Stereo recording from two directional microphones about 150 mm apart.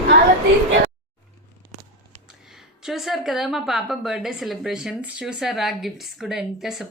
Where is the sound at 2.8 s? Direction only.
Centre (ahead or behind).